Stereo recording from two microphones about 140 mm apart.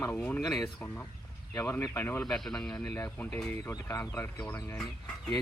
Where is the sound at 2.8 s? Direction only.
20° left (ahead or behind).